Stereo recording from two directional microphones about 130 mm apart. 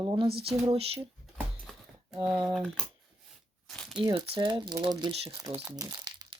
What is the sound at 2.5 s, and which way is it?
Speech, centre (ahead or behind).